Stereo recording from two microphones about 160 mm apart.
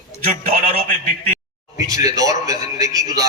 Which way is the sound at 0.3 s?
50° right (ahead or behind).